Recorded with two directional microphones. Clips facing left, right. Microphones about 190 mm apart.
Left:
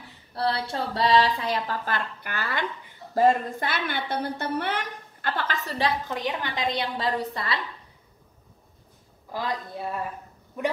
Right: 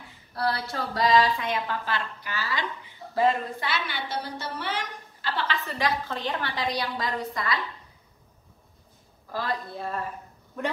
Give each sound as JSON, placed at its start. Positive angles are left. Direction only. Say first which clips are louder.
{"t": 0.3, "sound": "a woman's voice", "louder": "left 2 dB", "side_deg": 30}
{"t": 1.9, "sound": "a woman's voice", "louder": "left 1 dB", "side_deg": 55}
{"t": 6.0, "sound": "a woman's voice", "louder": "left 1 dB", "side_deg": 15}
{"t": 9.3, "sound": "a woman's voice", "louder": "even", "side_deg": 15}